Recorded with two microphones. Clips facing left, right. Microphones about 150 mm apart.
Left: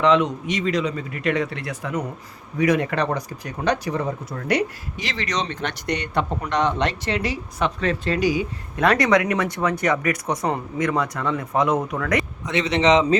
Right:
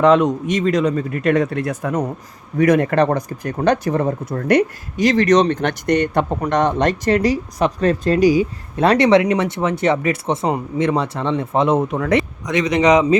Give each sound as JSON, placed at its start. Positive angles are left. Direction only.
{"t": 0.0, "sound": "a man's voice", "side_deg": -45}